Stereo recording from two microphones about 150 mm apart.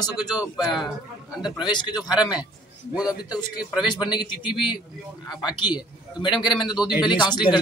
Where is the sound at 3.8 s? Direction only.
30° left (ahead or behind).